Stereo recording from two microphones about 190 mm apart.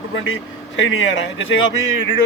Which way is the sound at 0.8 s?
90° left.